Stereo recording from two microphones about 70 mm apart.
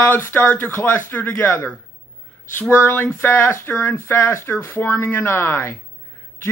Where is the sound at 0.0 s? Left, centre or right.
Left.